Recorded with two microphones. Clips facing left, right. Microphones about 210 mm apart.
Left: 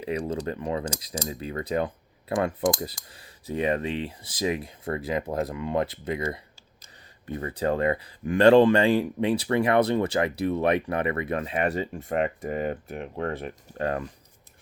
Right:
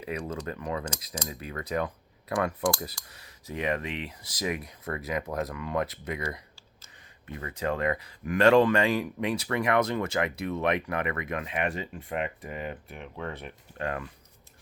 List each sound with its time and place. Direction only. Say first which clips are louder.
0.0 s speech: left 5 dB; 30° left (ahead or behind)